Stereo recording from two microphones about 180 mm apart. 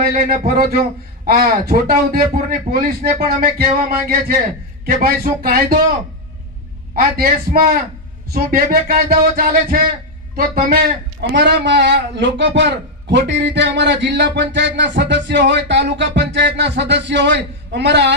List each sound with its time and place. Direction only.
0.0 s a man's voice: 50° right (ahead or behind)
6.9 s a man's voice: 55° right (ahead or behind); by 18.1 s 75° right (ahead or behind)